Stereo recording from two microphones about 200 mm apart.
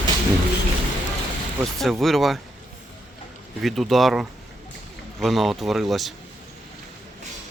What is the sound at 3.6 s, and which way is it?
Speech, centre (ahead or behind).